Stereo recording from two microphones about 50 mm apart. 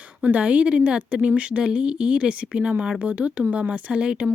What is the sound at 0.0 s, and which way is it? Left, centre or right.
A woman's voice, right.